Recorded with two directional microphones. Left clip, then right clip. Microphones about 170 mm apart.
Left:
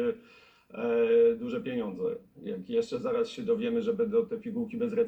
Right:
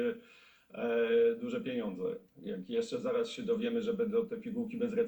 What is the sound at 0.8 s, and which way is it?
A man's voice, centre (ahead or behind).